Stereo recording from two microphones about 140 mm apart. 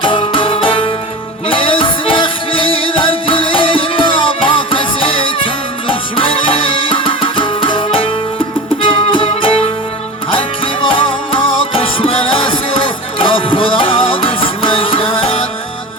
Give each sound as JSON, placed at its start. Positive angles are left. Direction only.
{"t": 0.0, "sound": "music", "side_deg": 40}